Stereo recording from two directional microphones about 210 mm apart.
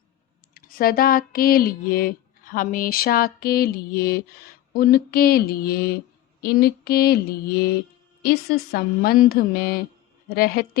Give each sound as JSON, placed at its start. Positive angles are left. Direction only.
{"t": 0.5, "sound": "speech", "side_deg": 45}